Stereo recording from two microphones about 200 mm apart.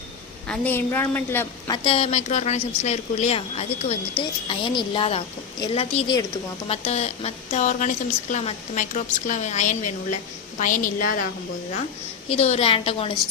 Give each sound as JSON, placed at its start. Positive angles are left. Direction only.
{"t": 0.4, "sound": "a woman's voice", "side_deg": 5}
{"t": 1.7, "sound": "a woman's voice", "side_deg": 25}
{"t": 12.3, "sound": "a woman's voice", "side_deg": 30}